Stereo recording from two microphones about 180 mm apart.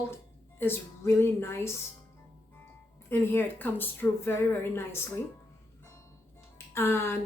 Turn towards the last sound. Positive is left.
turn(degrees=15)  # may be behind; listen again after turning